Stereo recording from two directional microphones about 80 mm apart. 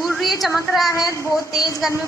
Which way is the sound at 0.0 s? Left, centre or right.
Centre.